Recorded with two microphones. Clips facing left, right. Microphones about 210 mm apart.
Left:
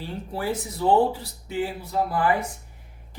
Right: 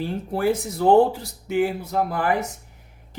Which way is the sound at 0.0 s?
55° right (ahead or behind).